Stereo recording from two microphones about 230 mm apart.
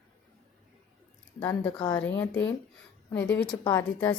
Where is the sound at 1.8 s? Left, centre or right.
Left.